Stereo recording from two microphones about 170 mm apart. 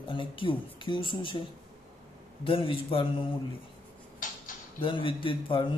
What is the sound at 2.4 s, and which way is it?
Speech, 30° left (ahead or behind).